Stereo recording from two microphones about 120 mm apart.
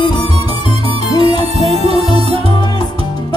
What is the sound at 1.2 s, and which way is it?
Music, 55° right (ahead or behind).